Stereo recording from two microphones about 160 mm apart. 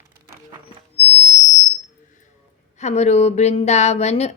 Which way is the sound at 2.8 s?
45° left (ahead or behind).